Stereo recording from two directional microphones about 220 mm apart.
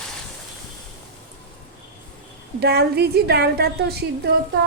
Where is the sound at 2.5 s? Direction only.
50° right (ahead or behind).